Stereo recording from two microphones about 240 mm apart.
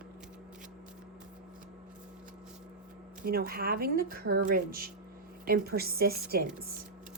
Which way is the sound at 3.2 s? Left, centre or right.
Right.